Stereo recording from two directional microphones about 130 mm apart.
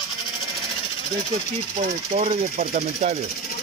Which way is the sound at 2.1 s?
55° right (ahead or behind).